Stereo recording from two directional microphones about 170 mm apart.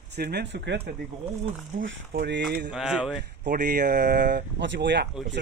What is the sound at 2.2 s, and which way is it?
Speech, 70° right (ahead or behind).